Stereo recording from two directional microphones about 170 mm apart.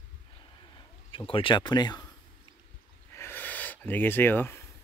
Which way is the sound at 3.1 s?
15° left (ahead or behind).